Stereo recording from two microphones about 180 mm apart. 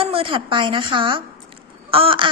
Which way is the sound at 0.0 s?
30° right (ahead or behind).